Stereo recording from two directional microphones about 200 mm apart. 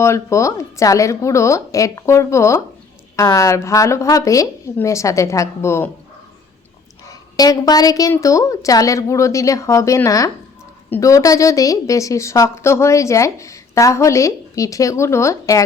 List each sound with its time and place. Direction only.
0.0 s a woman's voice: 15° left (ahead or behind)
7.1 s a woman's voice: 20° left (ahead or behind)